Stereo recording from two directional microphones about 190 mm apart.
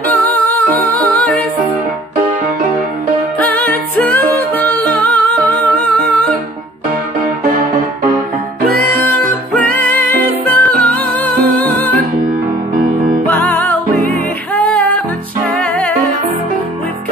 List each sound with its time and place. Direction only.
0.1 s music: 10° left (ahead or behind)
3.3 s music: 10° left (ahead or behind)
8.9 s music: 10° left (ahead or behind)
13.3 s music: 10° left (ahead or behind)